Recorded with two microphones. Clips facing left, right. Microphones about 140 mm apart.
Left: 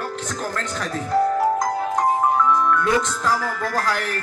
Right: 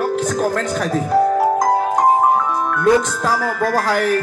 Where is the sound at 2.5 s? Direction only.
50° right (ahead or behind).